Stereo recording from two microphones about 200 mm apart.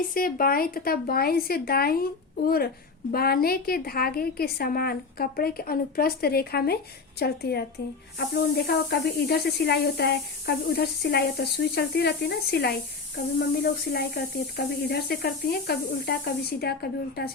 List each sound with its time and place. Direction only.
0.1 s speech: 45° left (ahead or behind)